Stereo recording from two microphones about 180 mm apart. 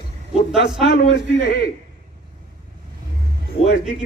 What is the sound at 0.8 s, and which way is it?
Speech, 60° left (ahead or behind).